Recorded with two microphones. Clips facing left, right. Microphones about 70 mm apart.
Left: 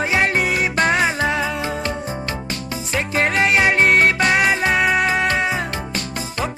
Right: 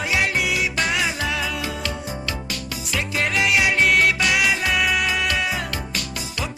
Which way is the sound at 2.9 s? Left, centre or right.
Left.